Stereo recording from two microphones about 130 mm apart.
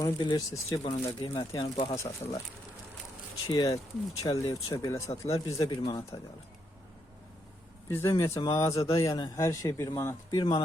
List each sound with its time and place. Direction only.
0.0 s speech: 30° left (ahead or behind); by 2.3 s 50° left (ahead or behind)
3.4 s speech: 25° left (ahead or behind)
4.3 s speech: 35° left (ahead or behind)
4.7 s speech: 25° left (ahead or behind)
7.9 s speech: 20° left (ahead or behind)
8.8 s speech: 45° left (ahead or behind)
9.0 s speech: 35° left (ahead or behind)
9.3 s speech: 25° left (ahead or behind)